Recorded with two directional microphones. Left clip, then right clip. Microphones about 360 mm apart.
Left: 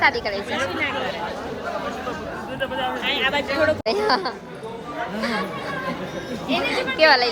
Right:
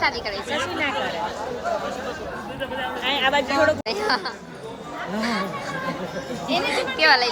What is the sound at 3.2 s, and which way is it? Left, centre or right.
Speech, right.